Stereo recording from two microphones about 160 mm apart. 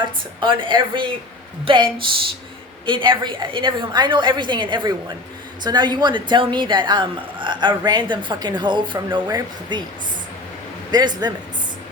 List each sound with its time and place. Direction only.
0.0 s a woman's voice: 30° right (ahead or behind)
10.9 s a woman's voice: 25° right (ahead or behind)